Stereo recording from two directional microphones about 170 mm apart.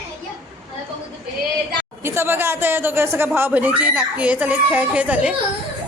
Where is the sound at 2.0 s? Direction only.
15° right (ahead or behind).